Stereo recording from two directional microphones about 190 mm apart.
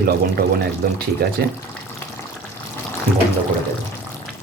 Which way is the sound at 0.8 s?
50° right (ahead or behind).